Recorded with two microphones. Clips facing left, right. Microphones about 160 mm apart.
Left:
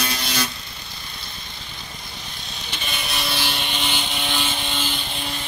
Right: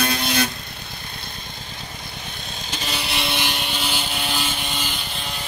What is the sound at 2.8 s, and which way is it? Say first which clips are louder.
Vehicle: right 2 dB; 30° right (ahead or behind).